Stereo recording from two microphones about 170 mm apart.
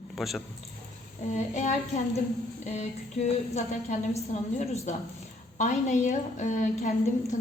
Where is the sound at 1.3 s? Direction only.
45° left (ahead or behind).